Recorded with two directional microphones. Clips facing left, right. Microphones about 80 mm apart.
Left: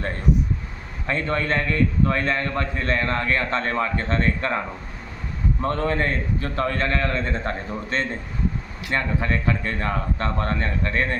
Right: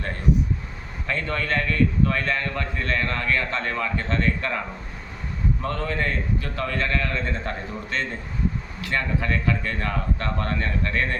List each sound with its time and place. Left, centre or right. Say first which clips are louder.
1.0 s a man's voice: left 3 dB; left
5.6 s a man's voice: left 5 dB; left